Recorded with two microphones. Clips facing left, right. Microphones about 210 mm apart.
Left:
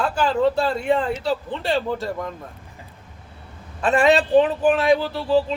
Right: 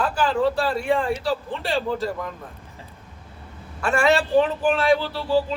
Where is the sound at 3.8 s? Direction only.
20° left (ahead or behind).